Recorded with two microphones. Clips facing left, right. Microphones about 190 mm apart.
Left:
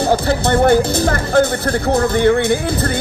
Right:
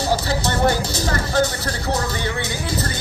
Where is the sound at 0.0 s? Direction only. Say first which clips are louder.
Left 6 dB; 55° left (ahead or behind).